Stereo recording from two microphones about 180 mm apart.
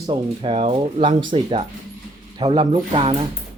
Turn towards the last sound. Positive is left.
turn(degrees=-30)  # may be behind; listen again after turning